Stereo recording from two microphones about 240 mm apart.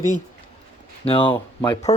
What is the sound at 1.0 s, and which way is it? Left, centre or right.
Speech, left.